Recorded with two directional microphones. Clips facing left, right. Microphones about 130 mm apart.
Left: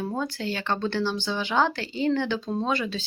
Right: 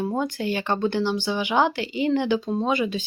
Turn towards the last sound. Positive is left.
turn(degrees=-15)  # may be behind; listen again after turning